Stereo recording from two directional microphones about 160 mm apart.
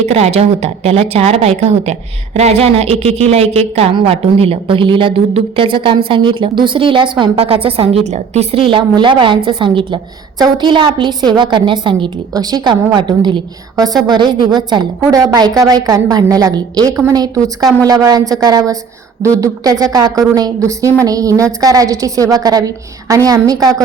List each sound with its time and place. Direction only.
0.0 s a woman's voice: 40° right (ahead or behind); by 23.8 s 25° right (ahead or behind)